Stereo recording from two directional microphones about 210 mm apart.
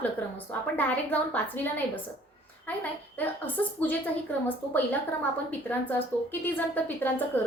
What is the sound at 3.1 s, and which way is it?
Speech, 10° left (ahead or behind).